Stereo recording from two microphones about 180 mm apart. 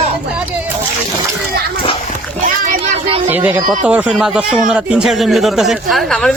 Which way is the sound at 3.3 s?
10° right (ahead or behind).